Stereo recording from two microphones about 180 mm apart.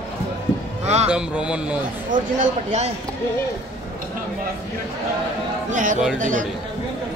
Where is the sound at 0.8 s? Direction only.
35° right (ahead or behind).